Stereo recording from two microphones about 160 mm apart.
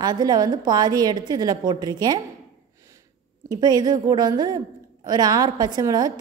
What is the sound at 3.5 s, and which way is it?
A woman's voice, 25° right (ahead or behind).